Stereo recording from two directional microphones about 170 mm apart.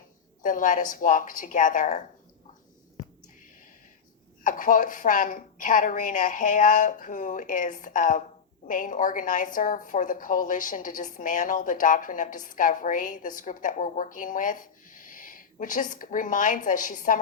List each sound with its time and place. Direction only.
0.4 s a woman's voice: 50° left (ahead or behind)
4.4 s a woman's voice: 50° left (ahead or behind)